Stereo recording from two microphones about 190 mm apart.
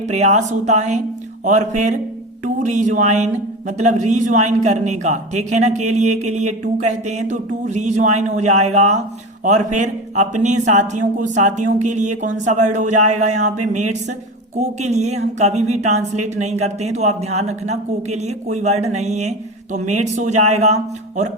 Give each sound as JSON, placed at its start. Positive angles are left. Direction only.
{"t": 0.1, "sound": "speech", "side_deg": -35}